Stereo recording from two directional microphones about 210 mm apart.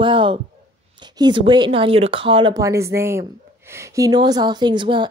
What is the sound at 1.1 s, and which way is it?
A woman's voice, 20° right (ahead or behind).